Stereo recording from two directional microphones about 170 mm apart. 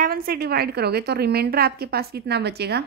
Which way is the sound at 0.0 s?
60° right (ahead or behind).